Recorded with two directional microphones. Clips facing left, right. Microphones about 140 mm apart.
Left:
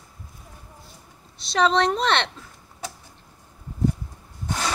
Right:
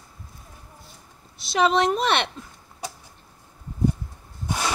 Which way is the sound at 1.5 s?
5° right (ahead or behind).